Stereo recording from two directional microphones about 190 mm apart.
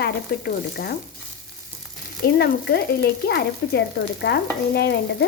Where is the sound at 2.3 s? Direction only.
55° left (ahead or behind).